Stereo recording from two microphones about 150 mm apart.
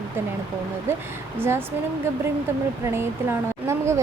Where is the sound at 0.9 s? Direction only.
15° right (ahead or behind).